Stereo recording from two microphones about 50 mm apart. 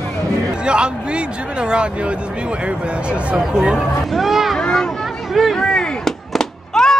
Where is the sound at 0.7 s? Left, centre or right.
Centre.